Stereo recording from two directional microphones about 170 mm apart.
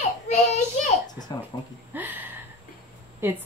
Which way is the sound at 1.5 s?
20° left (ahead or behind).